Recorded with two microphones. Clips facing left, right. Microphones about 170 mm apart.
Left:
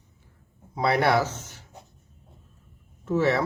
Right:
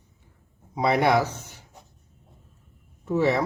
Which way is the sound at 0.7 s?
15° right (ahead or behind).